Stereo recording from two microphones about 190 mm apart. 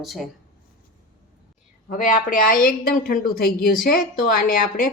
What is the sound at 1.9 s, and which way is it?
A woman's voice, 45° left (ahead or behind).